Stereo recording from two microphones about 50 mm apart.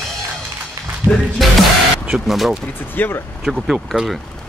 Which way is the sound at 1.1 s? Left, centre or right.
Centre.